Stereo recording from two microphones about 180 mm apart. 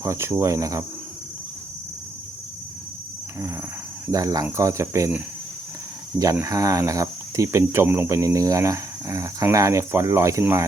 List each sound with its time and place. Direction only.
0.0 s speech: 15° right (ahead or behind)
4.1 s speech: 20° right (ahead or behind)
6.4 s speech: 20° right (ahead or behind)